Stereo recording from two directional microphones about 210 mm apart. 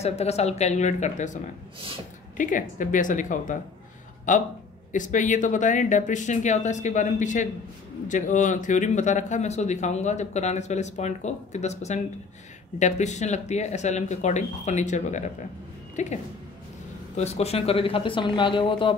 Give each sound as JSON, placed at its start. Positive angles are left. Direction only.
{"t": 0.0, "sound": "speech", "side_deg": 30}
{"t": 17.2, "sound": "speech", "side_deg": 30}